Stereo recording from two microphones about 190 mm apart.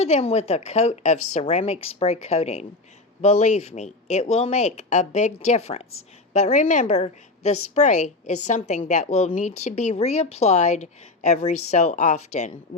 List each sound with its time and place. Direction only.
0.0 s speech: 35° left (ahead or behind)